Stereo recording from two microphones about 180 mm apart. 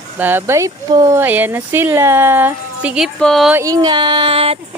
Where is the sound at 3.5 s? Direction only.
20° right (ahead or behind).